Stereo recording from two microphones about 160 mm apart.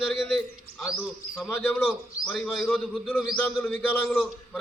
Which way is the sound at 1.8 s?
Centre (ahead or behind).